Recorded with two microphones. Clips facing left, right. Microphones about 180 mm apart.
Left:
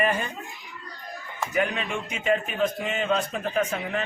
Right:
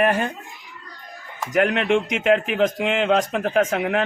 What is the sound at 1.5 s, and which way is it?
A man's voice, 75° right (ahead or behind).